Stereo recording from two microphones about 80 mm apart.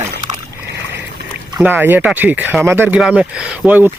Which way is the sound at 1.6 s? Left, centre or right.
Right.